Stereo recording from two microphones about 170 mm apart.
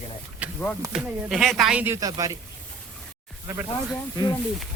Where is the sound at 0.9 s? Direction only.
Centre (ahead or behind); by 2.4 s 20° right (ahead or behind).